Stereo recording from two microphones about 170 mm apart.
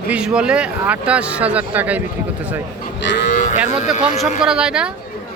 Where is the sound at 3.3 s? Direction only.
45° left (ahead or behind).